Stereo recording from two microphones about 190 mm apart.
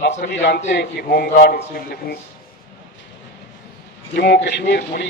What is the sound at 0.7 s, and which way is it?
Speech, 60° left (ahead or behind).